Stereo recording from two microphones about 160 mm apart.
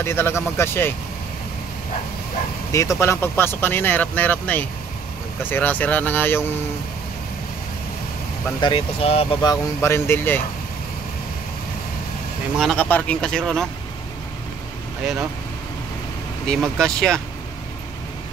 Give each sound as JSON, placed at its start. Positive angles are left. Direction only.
{"t": 0.0, "sound": "speech", "side_deg": 15}
{"t": 2.7, "sound": "speech", "side_deg": 20}
{"t": 8.5, "sound": "speech", "side_deg": 30}
{"t": 9.8, "sound": "speech", "side_deg": 15}
{"t": 12.5, "sound": "speech", "side_deg": 5}
{"t": 16.4, "sound": "speech", "side_deg": 5}